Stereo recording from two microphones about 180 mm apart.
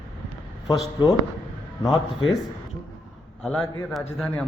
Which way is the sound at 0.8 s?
30° left (ahead or behind).